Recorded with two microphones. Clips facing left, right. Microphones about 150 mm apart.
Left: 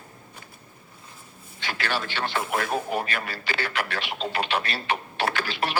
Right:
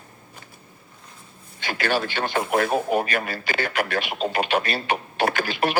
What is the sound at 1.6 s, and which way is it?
Speech, 45° right (ahead or behind).